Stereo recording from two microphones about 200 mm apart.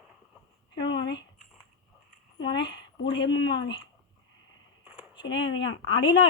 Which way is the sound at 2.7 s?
65° left (ahead or behind).